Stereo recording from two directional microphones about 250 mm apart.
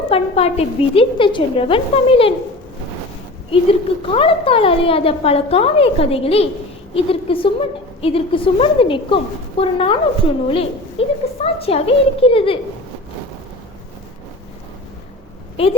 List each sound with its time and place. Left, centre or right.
0.1 s a woman's voice: left
3.5 s a woman's voice: left